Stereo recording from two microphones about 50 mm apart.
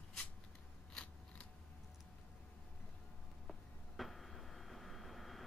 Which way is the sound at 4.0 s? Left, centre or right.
Centre.